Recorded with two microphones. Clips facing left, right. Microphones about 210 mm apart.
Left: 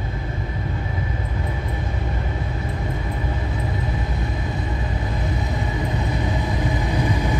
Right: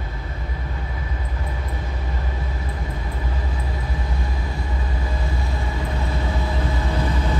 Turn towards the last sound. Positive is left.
turn(degrees=15)  # may be behind; listen again after turning